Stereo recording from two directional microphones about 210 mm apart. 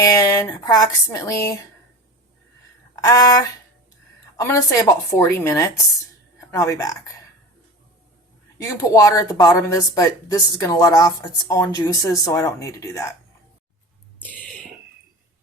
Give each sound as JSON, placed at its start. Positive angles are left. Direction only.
{"t": 0.0, "sound": "speech", "side_deg": 15}
{"t": 2.9, "sound": "speech", "side_deg": 15}
{"t": 8.8, "sound": "speech", "side_deg": 15}
{"t": 14.2, "sound": "a sound", "side_deg": 5}